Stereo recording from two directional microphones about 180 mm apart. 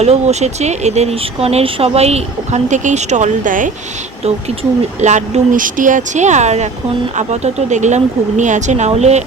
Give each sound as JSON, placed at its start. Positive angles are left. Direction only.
{"t": 0.0, "sound": "speech", "side_deg": -35}
{"t": 4.9, "sound": "speech", "side_deg": -40}